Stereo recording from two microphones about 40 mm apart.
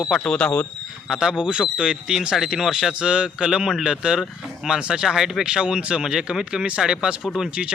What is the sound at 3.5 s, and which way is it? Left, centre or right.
Speech, centre.